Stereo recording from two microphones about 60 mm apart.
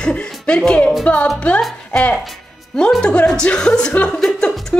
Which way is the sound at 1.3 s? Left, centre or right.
Left.